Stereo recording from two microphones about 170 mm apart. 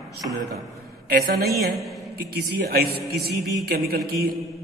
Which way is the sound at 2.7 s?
65° right (ahead or behind).